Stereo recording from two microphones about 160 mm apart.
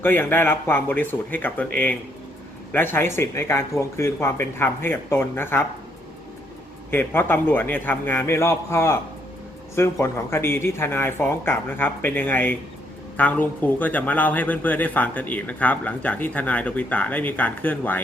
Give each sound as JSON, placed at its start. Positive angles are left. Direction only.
{"t": 0.0, "sound": "speech", "side_deg": 10}
{"t": 6.9, "sound": "speech", "side_deg": 15}